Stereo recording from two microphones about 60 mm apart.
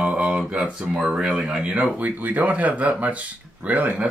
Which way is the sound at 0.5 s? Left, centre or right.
Centre.